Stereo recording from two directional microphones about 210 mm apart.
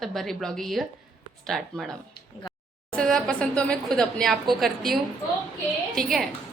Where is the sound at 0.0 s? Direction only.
Centre (ahead or behind).